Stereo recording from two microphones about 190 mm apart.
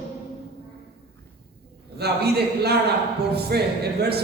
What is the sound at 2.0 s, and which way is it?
Speech, 60° right (ahead or behind).